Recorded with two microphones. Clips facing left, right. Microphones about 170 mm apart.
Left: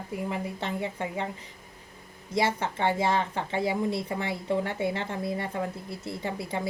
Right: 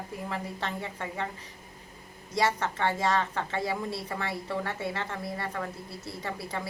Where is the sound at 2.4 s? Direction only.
15° left (ahead or behind).